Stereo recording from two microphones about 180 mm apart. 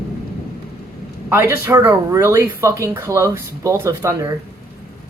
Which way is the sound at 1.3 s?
15° right (ahead or behind).